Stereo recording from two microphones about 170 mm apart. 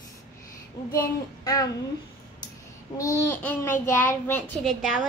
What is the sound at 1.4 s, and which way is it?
Speech, 20° left (ahead or behind).